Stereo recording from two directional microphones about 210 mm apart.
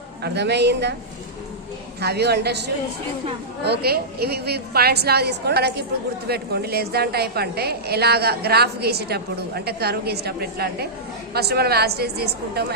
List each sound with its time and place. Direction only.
0.2 s a woman's voice: 55° right (ahead or behind)
2.0 s a woman's voice: 50° right (ahead or behind)